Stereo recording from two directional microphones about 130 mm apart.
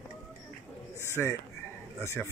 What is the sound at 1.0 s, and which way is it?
Speech, 20° left (ahead or behind).